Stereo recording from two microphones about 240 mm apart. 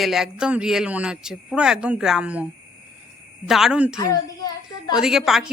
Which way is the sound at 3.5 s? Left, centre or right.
Centre.